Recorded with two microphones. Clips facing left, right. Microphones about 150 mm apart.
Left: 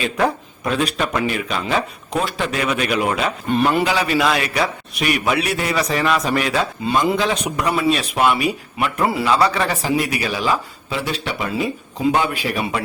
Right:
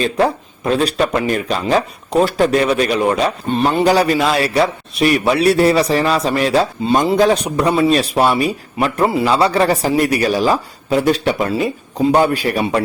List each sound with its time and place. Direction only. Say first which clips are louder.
0.0 s a man's voice: right 4 dB; 30° right (ahead or behind)
3.8 s a man's voice: right 5 dB; 40° right (ahead or behind)